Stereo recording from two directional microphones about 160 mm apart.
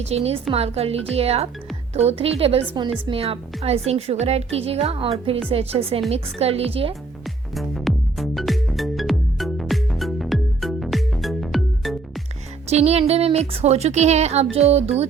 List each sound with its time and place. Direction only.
0.0 s a woman's voice: 40° right (ahead or behind)
7.5 s music: centre (ahead or behind)
12.6 s a woman's voice: 40° right (ahead or behind)